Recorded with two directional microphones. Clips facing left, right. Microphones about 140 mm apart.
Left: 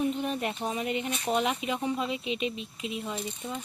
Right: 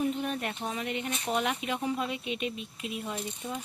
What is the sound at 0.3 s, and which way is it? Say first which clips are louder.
Speech: left 3 dB; 15° left (ahead or behind).